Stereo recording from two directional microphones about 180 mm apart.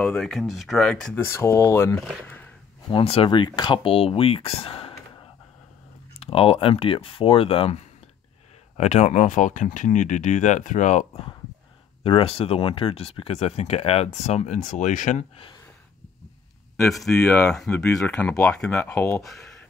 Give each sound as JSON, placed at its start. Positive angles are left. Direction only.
{"t": 0.0, "sound": "speech", "side_deg": 0}
{"t": 1.2, "sound": "speech", "side_deg": 15}
{"t": 2.2, "sound": "a sound", "side_deg": 10}
{"t": 2.9, "sound": "speech", "side_deg": 30}
{"t": 6.1, "sound": "speech", "side_deg": 35}
{"t": 12.0, "sound": "speech", "side_deg": 30}
{"t": 16.7, "sound": "speech", "side_deg": 0}